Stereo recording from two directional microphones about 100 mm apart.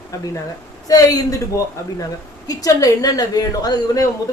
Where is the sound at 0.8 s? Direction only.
35° left (ahead or behind).